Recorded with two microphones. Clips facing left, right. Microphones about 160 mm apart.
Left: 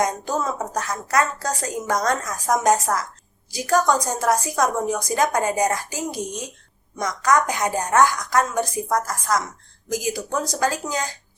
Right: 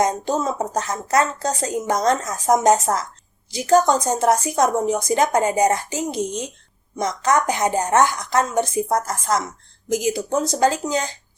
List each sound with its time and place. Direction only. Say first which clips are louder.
0.0 s a woman's voice: right 3 dB; 25° right (ahead or behind)